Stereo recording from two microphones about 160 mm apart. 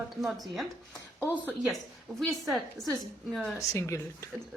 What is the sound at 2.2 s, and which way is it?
A woman's voice, centre (ahead or behind).